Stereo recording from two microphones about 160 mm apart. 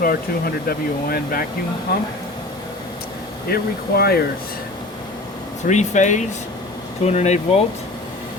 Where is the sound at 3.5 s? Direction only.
75° left (ahead or behind).